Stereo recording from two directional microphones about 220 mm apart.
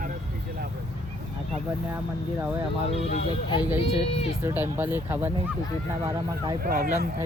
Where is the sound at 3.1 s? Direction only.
20° left (ahead or behind).